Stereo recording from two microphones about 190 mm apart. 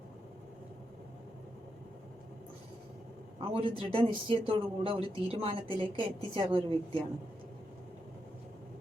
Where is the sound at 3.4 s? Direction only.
30° right (ahead or behind).